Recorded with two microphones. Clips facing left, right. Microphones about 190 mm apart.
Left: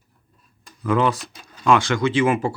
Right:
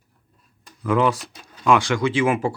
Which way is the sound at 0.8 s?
10° right (ahead or behind).